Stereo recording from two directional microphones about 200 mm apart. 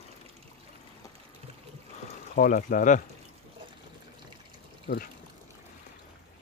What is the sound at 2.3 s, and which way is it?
Speech, 45° left (ahead or behind).